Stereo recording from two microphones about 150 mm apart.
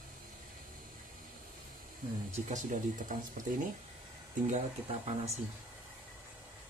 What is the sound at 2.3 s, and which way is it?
Speech, 60° right (ahead or behind).